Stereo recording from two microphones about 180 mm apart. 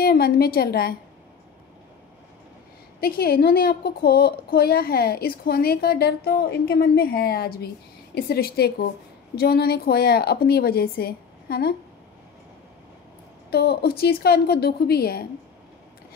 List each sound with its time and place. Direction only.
0.0 s a woman's voice: 60° left (ahead or behind)
3.0 s a woman's voice: 60° left (ahead or behind)
13.5 s a woman's voice: 65° left (ahead or behind)